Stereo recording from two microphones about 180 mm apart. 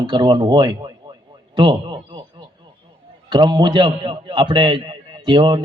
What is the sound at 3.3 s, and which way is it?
A man's voice, 25° right (ahead or behind).